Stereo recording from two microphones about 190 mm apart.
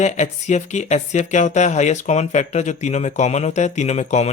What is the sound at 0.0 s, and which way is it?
Speech, 35° left (ahead or behind).